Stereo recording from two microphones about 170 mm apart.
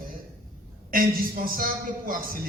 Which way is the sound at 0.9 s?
55° right (ahead or behind).